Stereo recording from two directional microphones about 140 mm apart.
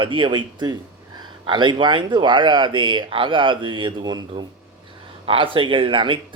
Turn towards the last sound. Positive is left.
turn(degrees=-35)  # may be behind; listen again after turning